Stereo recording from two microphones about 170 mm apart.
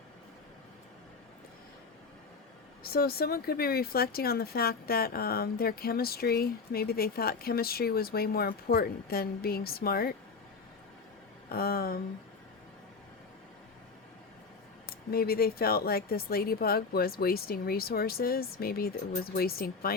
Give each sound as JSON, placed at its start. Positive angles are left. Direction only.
{"t": 2.8, "sound": "speech", "side_deg": 65}
{"t": 11.4, "sound": "speech", "side_deg": 60}
{"t": 15.1, "sound": "speech", "side_deg": 65}